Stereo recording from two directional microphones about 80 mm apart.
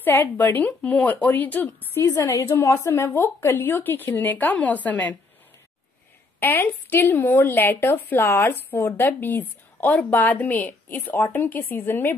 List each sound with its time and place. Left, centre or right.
0.0 s a woman's voice: left
2.0 s a woman's voice: left; by 5.1 s centre
6.4 s a woman's voice: left